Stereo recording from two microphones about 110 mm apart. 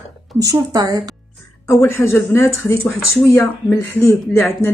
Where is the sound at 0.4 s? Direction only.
30° right (ahead or behind).